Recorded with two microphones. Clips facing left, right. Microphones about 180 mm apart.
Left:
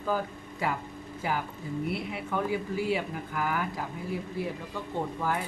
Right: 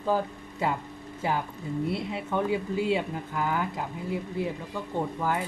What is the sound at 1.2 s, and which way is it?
Speech, 25° right (ahead or behind).